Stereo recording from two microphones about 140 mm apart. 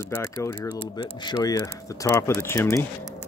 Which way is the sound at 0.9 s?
30° left (ahead or behind).